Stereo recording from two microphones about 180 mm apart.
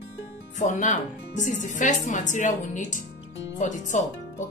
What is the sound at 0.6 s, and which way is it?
A woman's voice, 45° left (ahead or behind).